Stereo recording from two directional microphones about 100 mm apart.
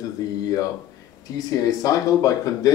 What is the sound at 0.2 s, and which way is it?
Speech, 35° left (ahead or behind).